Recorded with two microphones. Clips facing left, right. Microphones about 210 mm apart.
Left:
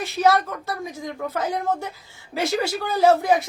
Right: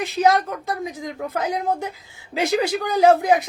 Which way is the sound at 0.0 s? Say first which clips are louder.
Right 1 dB; 15° right (ahead or behind).